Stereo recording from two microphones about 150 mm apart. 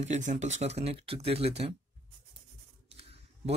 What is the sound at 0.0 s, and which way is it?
Speech, 50° right (ahead or behind).